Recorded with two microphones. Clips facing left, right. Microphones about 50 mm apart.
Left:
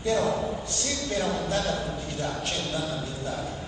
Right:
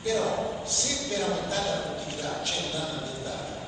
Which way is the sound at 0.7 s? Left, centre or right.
Left.